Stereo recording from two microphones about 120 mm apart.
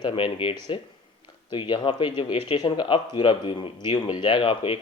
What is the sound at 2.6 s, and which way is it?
Speech, 35° left (ahead or behind).